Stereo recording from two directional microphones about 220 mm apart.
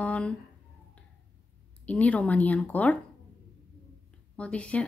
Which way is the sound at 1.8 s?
5° left (ahead or behind).